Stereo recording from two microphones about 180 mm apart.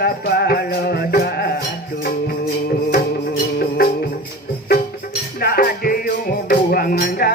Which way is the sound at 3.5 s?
60° left (ahead or behind).